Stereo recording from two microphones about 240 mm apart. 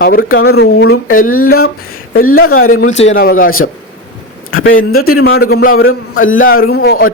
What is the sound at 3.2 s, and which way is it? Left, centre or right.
Speech, left.